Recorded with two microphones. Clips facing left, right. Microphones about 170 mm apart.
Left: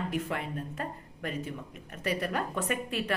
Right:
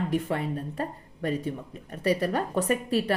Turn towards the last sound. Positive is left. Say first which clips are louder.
# right 6 dB
turn(degrees=-35)  # may be behind; listen again after turning